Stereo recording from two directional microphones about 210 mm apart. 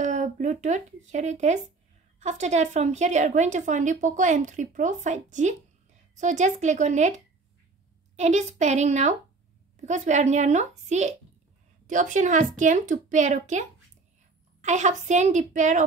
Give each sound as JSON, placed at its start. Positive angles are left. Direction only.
{"t": 0.0, "sound": "a woman's voice", "side_deg": -35}
{"t": 8.2, "sound": "a woman's voice", "side_deg": -35}